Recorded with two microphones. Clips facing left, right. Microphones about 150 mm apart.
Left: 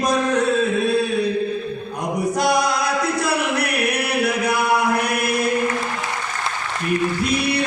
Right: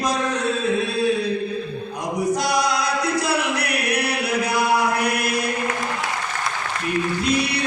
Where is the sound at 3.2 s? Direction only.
55° left (ahead or behind).